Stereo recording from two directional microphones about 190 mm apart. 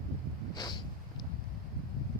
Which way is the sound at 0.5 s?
20° left (ahead or behind).